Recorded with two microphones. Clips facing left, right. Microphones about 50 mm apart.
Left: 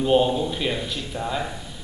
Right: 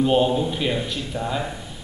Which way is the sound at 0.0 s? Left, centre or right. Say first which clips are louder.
Right 1 dB; centre.